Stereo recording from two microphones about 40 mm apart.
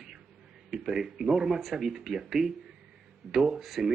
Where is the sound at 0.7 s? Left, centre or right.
Centre.